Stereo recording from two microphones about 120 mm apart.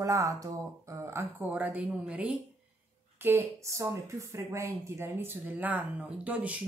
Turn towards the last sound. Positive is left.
turn(degrees=-10)  # may be behind; listen again after turning